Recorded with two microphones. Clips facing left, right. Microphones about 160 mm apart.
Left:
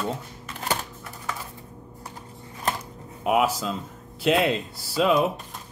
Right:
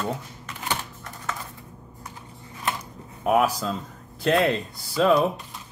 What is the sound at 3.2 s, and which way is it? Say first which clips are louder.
Speech: right 1 dB; 10° left (ahead or behind).